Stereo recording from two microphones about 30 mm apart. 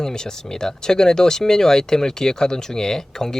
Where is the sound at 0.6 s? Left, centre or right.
Centre.